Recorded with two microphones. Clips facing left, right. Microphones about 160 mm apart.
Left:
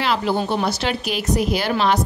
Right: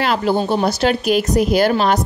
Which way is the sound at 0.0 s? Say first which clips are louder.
Right 3 dB; 45° right (ahead or behind).